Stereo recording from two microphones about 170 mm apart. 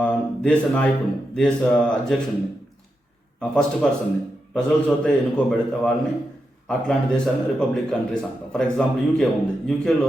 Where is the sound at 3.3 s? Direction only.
5° left (ahead or behind).